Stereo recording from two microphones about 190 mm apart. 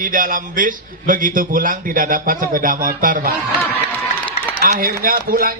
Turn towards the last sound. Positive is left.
turn(degrees=-50)  # may be behind; listen again after turning